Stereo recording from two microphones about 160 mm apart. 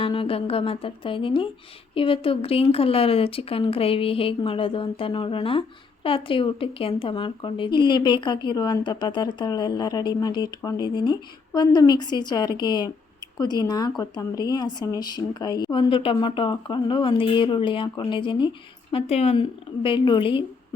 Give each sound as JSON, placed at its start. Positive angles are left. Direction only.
{"t": 0.0, "sound": "speech", "side_deg": 35}